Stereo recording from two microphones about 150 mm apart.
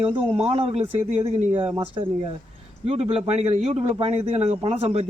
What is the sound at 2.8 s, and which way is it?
A man's voice, 40° right (ahead or behind).